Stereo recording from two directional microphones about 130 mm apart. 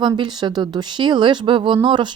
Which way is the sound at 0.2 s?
35° right (ahead or behind).